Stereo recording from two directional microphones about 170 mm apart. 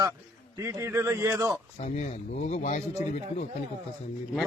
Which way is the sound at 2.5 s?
45° left (ahead or behind).